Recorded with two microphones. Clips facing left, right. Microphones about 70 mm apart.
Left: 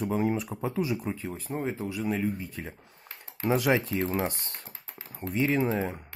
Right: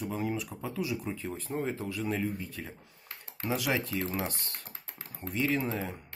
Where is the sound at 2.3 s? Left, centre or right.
Left.